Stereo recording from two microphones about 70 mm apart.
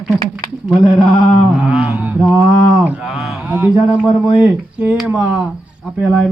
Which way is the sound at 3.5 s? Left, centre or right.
Right.